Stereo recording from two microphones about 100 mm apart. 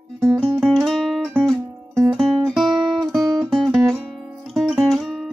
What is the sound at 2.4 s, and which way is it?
Guitar, centre (ahead or behind).